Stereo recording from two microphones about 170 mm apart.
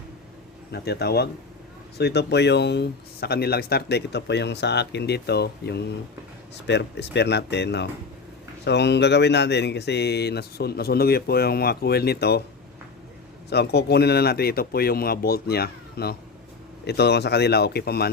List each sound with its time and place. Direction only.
0.7 s speech: 70° left (ahead or behind)
6.7 s speech: 85° left; by 12.4 s 70° left (ahead or behind)
13.5 s speech: 75° left (ahead or behind)